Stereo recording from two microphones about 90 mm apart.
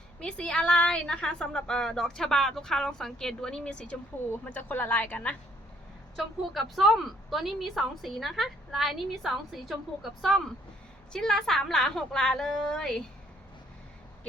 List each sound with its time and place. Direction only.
0.2 s a woman's voice: 10° left (ahead or behind)
6.1 s a woman's voice: centre (ahead or behind)